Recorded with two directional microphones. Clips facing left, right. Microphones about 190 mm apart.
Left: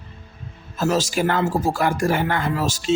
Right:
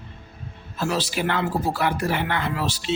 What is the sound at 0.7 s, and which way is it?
Speech, 45° left (ahead or behind).